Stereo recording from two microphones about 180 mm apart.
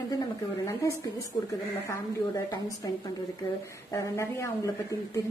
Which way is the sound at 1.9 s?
20° left (ahead or behind).